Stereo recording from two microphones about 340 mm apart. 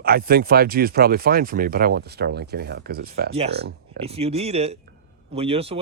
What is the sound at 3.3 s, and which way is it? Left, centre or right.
Speech, centre.